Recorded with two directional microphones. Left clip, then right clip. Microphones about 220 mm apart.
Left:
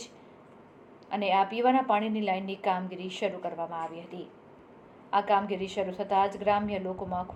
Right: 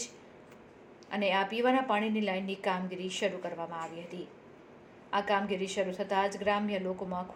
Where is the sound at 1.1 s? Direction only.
25° right (ahead or behind).